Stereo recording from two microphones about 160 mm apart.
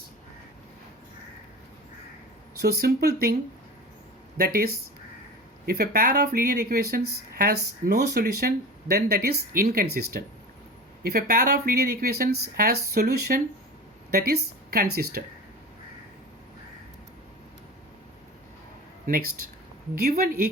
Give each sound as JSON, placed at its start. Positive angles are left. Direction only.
{"t": 2.6, "sound": "speech", "side_deg": -75}
{"t": 4.4, "sound": "speech", "side_deg": -65}
{"t": 20.0, "sound": "speech", "side_deg": -70}